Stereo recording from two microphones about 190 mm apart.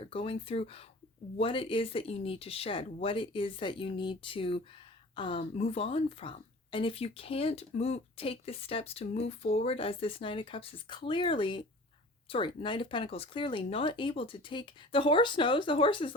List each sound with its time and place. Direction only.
0.0 s speech: 30° left (ahead or behind)